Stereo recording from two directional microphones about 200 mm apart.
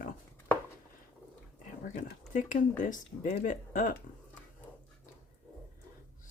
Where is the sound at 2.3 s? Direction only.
40° left (ahead or behind).